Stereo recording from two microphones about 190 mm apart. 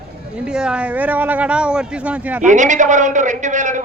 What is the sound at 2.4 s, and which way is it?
Speech, 40° right (ahead or behind).